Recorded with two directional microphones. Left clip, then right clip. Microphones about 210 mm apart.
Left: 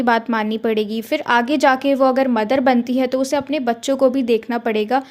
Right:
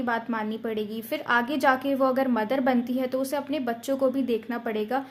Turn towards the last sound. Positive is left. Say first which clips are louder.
# left 10 dB
turn(degrees=35)  # may be behind; listen again after turning